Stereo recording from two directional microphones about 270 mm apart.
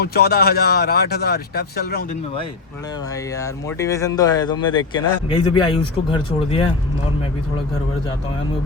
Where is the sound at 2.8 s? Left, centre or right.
Centre.